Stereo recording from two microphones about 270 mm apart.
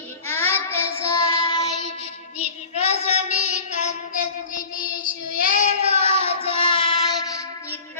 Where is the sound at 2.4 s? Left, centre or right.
Left.